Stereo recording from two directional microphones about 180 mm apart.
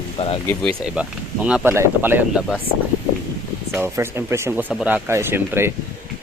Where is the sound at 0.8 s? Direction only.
5° right (ahead or behind).